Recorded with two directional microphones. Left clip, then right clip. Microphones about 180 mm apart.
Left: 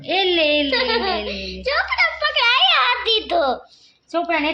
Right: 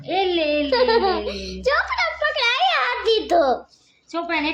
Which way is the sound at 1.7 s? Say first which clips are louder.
Left 5 dB; 40° right (ahead or behind).